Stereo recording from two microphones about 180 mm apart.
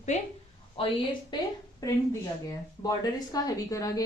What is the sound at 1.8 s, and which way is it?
Speech, 20° left (ahead or behind).